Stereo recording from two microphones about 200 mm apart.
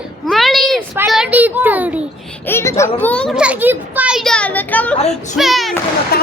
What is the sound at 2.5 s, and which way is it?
A child's voice, 15° left (ahead or behind).